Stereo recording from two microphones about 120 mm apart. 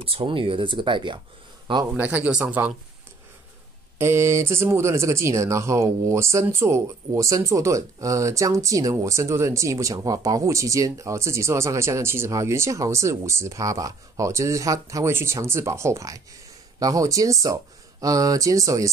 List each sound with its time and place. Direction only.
0.0 s speech: 50° right (ahead or behind)
2.0 s speech: 15° right (ahead or behind)
4.0 s speech: 20° right (ahead or behind)